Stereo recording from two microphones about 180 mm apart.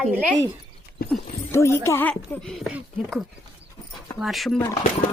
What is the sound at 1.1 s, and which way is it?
A woman's voice, 15° left (ahead or behind).